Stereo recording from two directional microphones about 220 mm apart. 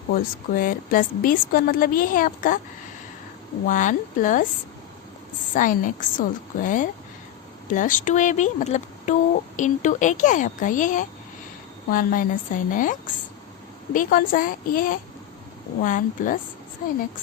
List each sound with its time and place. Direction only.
0.5 s a woman's voice: 40° left (ahead or behind)
3.7 s a woman's voice: 35° left (ahead or behind)
5.5 s a woman's voice: 35° left (ahead or behind)